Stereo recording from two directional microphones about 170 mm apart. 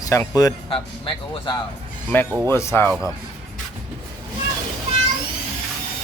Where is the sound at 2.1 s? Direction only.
10° left (ahead or behind).